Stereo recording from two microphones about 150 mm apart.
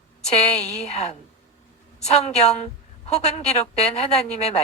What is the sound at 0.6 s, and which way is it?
A woman's voice, 45° left (ahead or behind).